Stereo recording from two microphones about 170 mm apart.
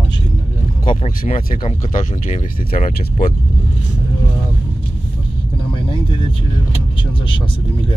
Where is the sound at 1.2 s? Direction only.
55° left (ahead or behind).